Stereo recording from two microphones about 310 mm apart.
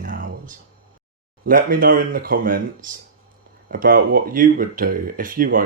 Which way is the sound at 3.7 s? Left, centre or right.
Right.